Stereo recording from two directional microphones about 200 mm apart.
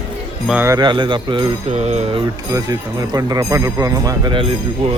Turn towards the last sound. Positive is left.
turn(degrees=-25)  # may be behind; listen again after turning